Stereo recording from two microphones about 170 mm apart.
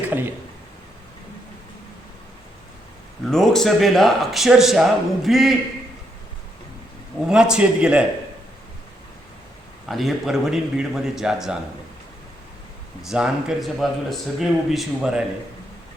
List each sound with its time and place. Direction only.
0.1 s speech: 10° right (ahead or behind)
3.2 s speech: centre (ahead or behind)
7.3 s speech: 5° right (ahead or behind)
9.8 s speech: centre (ahead or behind)
13.0 s speech: 5° right (ahead or behind)